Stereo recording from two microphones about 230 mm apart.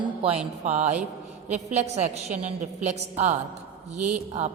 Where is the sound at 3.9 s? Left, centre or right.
Centre.